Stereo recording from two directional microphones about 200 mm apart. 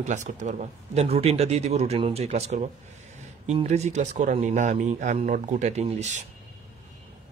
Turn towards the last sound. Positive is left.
turn(degrees=-35)  # may be behind; listen again after turning